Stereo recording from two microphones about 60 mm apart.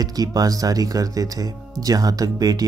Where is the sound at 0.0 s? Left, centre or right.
Right.